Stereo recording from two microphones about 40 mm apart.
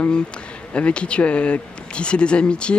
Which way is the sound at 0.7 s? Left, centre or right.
Left.